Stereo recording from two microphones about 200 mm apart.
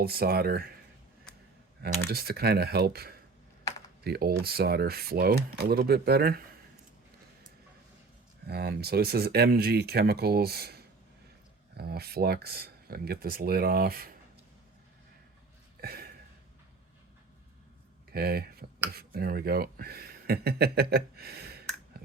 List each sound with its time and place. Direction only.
0.0 s speech: 50° right (ahead or behind)
1.8 s speech: 55° right (ahead or behind)
3.6 s computer keyboard: 15° left (ahead or behind)
4.0 s speech: 50° right (ahead or behind)
8.4 s speech: 50° right (ahead or behind)
15.8 s a sound: 50° right (ahead or behind)
18.1 s speech: 50° right (ahead or behind)